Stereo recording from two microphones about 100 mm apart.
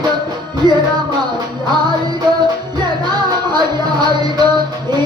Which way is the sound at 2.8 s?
45° right (ahead or behind).